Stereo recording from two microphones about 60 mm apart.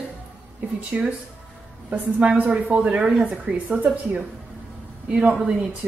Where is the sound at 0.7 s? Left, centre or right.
Right.